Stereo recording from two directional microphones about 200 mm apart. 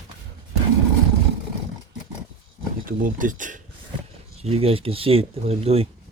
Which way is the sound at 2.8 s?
45° right (ahead or behind).